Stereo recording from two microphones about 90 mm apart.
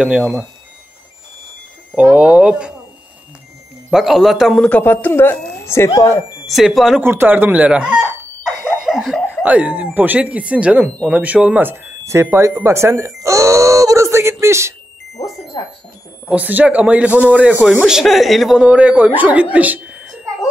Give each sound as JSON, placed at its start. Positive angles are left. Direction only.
{"t": 0.0, "sound": "speech", "side_deg": -5}
{"t": 2.1, "sound": "speech", "side_deg": -10}
{"t": 3.9, "sound": "speech", "side_deg": -5}
{"t": 4.6, "sound": "speech", "side_deg": 15}
{"t": 6.4, "sound": "speech", "side_deg": 0}
{"t": 7.0, "sound": "giggle", "side_deg": -25}
{"t": 9.4, "sound": "speech", "side_deg": -15}
{"t": 12.6, "sound": "doorbell", "side_deg": -30}
{"t": 15.5, "sound": "music", "side_deg": 55}
{"t": 16.3, "sound": "speech", "side_deg": -15}
{"t": 17.8, "sound": "speech", "side_deg": -5}
{"t": 18.6, "sound": "speech", "side_deg": -10}